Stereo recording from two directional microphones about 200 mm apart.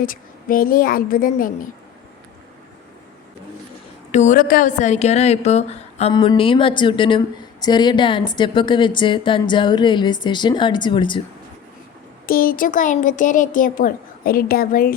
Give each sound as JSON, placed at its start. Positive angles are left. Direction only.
{"t": 0.0, "sound": "a woman's voice", "side_deg": 45}
{"t": 4.1, "sound": "a woman's voice", "side_deg": 35}
{"t": 12.2, "sound": "a woman's voice", "side_deg": 45}